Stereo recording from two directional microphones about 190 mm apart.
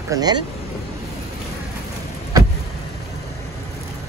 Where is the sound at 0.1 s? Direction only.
20° right (ahead or behind).